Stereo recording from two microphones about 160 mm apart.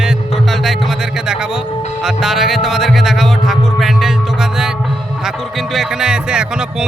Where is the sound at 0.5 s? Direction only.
Centre (ahead or behind).